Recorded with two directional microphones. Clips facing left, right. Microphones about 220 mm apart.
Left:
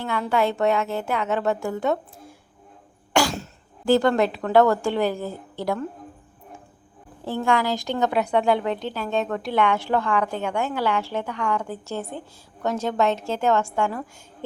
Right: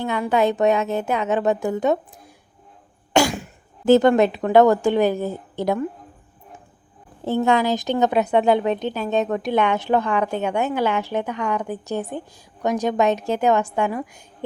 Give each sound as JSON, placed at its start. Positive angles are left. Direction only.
{"t": 0.0, "sound": "a woman's voice", "side_deg": -20}
{"t": 7.3, "sound": "a woman's voice", "side_deg": -20}